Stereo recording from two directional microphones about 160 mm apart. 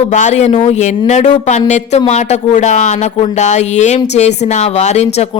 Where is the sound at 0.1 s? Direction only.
50° left (ahead or behind).